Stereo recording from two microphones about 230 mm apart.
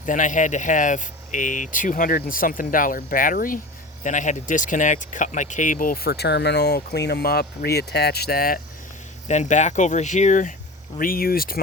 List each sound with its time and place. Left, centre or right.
0.0 s speech: left